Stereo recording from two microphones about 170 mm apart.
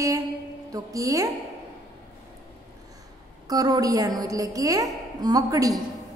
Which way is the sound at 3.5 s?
20° right (ahead or behind).